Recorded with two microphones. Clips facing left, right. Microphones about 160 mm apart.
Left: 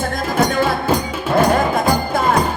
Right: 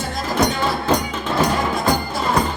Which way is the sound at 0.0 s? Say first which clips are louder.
Left 2 dB; 50° left (ahead or behind).